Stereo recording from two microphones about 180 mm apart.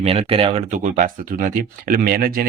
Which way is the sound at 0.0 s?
35° right (ahead or behind).